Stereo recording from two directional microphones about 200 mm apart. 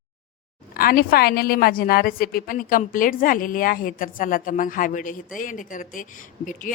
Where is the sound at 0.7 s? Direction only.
45° left (ahead or behind).